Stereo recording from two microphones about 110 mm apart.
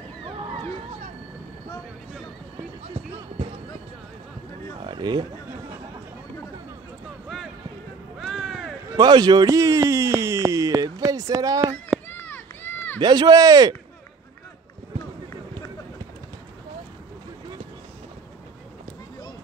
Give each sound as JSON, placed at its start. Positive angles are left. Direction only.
{"t": 4.8, "sound": "chatter", "side_deg": -45}
{"t": 8.2, "sound": "music", "side_deg": 0}
{"t": 8.9, "sound": "a sound", "side_deg": -40}
{"t": 12.1, "sound": "run", "side_deg": 15}
{"t": 13.0, "sound": "speech", "side_deg": -35}